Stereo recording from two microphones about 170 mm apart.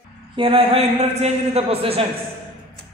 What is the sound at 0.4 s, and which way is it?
A man's voice, 30° right (ahead or behind).